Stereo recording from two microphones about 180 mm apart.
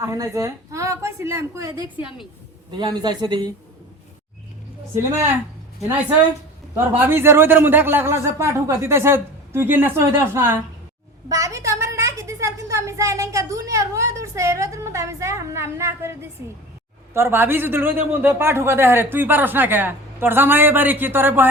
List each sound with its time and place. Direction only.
0.0 s a woman's voice: 20° right (ahead or behind)
6.7 s a man's voice: 10° right (ahead or behind)
17.2 s a man's voice: 15° right (ahead or behind)